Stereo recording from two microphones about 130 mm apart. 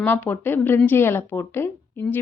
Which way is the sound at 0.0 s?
15° left (ahead or behind).